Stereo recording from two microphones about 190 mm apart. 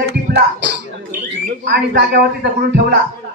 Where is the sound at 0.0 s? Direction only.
60° right (ahead or behind).